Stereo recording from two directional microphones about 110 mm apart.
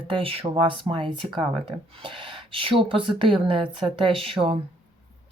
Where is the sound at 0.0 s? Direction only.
55° right (ahead or behind).